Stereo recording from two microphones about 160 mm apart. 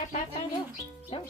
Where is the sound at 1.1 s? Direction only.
35° left (ahead or behind).